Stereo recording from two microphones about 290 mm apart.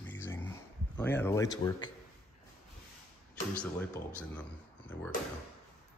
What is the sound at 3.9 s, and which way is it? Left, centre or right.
Speech, centre.